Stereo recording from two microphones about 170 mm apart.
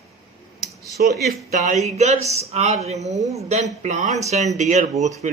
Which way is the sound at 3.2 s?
20° right (ahead or behind).